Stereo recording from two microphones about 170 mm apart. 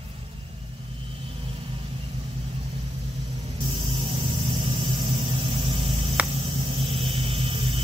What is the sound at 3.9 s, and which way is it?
Vehicle, 30° right (ahead or behind).